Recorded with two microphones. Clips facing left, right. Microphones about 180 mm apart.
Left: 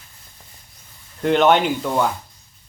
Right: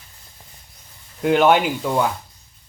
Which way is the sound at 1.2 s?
5° right (ahead or behind).